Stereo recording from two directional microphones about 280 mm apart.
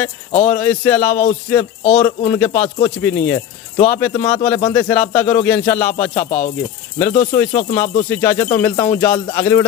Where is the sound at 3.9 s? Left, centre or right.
Centre.